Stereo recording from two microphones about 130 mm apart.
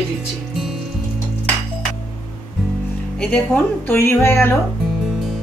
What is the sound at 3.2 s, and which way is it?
Speech, 10° left (ahead or behind).